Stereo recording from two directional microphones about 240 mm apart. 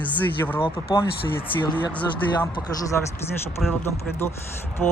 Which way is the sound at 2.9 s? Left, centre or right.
Centre.